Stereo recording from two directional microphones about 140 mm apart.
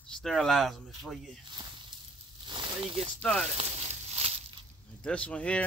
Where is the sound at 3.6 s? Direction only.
50° right (ahead or behind).